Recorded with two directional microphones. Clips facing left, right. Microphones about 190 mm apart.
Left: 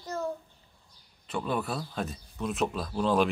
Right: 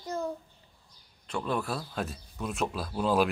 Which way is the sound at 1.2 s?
Centre (ahead or behind).